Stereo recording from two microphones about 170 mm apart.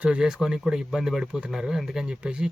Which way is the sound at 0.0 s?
5° right (ahead or behind).